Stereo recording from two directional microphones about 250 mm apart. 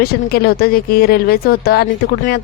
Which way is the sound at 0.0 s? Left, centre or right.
Left.